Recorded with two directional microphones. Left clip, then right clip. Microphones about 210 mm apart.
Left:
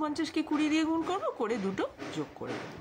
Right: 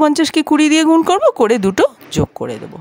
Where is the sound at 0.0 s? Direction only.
55° right (ahead or behind).